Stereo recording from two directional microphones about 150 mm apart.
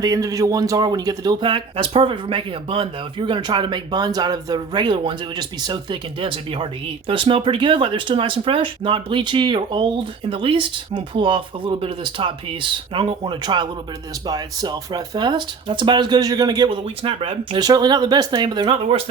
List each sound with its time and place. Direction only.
0.0 s speech: 25° right (ahead or behind)